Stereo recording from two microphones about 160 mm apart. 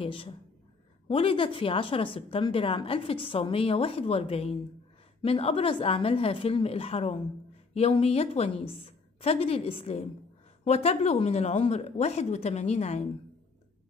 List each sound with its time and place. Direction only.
0.0 s a woman's voice: 35° left (ahead or behind)